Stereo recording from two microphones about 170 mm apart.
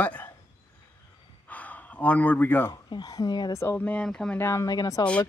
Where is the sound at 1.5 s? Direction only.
10° left (ahead or behind).